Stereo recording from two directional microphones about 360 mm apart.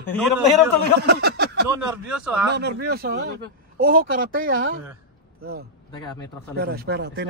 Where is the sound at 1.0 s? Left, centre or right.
Right.